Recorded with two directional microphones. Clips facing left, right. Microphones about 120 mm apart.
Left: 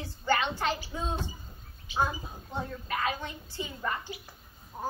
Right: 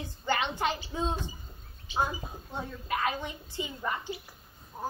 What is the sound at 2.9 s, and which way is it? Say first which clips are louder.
A woman's voice: right 3 dB; 15° right (ahead or behind).